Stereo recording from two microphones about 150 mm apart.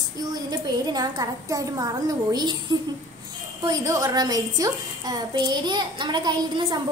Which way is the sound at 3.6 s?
25° right (ahead or behind).